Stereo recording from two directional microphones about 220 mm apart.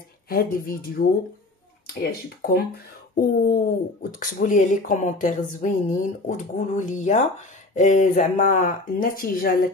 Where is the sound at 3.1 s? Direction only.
40° left (ahead or behind).